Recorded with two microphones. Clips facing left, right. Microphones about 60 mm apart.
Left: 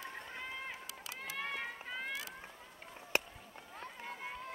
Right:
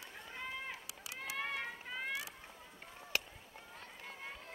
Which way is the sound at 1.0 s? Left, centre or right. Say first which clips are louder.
Right 1 dB; centre.